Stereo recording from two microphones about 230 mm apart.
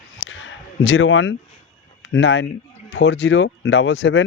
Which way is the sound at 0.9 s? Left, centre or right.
Left.